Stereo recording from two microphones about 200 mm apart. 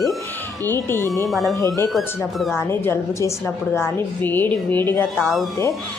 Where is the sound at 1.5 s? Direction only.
15° left (ahead or behind).